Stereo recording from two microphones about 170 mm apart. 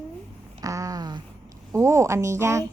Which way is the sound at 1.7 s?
15° right (ahead or behind).